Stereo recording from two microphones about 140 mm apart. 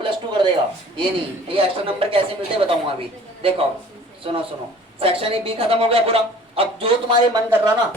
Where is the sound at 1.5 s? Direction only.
40° right (ahead or behind).